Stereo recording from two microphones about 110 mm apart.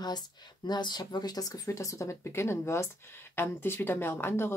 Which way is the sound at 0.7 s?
40° left (ahead or behind).